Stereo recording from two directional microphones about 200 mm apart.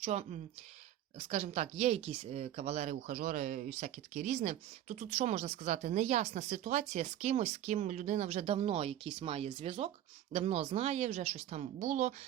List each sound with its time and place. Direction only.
0.0 s speech: 35° right (ahead or behind)